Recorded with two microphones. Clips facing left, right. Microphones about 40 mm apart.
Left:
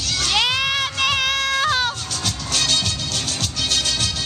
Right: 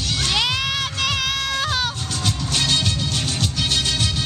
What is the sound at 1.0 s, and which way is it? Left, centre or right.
Music, centre.